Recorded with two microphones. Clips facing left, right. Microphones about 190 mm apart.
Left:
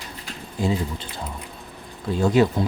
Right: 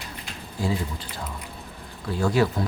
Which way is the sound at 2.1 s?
20° left (ahead or behind).